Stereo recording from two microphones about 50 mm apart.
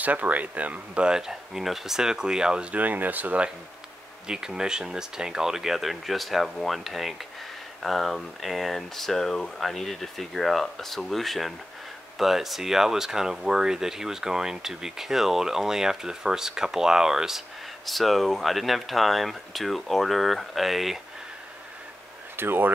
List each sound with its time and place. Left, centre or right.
0.0 s speech: right; by 2.7 s centre
2.7 s speech: right
4.3 s speech: centre
17.8 s speech: centre
22.4 s speech: right